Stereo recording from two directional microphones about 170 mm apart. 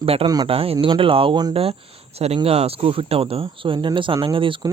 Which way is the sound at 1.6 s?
35° right (ahead or behind).